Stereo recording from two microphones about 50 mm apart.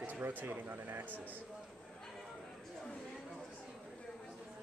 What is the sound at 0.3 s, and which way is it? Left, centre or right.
Speech, right.